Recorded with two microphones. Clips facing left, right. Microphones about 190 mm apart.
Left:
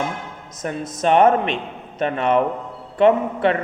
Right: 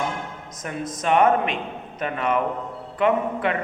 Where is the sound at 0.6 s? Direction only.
35° left (ahead or behind).